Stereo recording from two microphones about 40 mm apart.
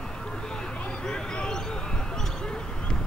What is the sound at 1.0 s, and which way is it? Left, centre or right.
Vehicle, centre.